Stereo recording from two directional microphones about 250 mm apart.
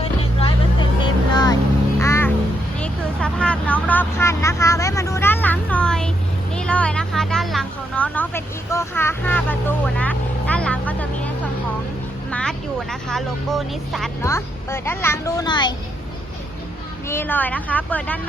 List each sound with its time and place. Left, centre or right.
0.0 s music: left
2.7 s vehicle: centre
6.5 s a sound: centre
12.3 s speech: centre
14.2 s speech: centre
17.1 s speech: centre